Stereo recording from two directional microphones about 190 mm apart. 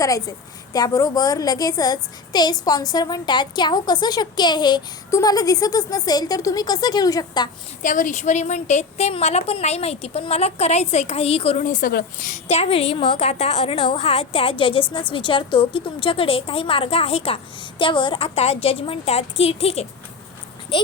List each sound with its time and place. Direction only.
0.0 s a woman's voice: 20° left (ahead or behind)
7.8 s a woman's voice: 40° left (ahead or behind)